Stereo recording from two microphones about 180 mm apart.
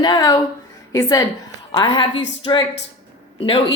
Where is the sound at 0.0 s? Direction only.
20° left (ahead or behind).